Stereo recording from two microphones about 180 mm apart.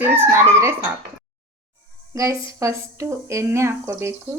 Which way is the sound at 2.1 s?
15° right (ahead or behind).